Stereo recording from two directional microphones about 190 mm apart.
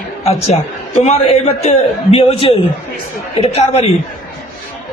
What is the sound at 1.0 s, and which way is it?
A man's voice, 30° left (ahead or behind).